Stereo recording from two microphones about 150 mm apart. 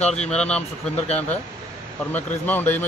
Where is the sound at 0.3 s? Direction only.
5° left (ahead or behind).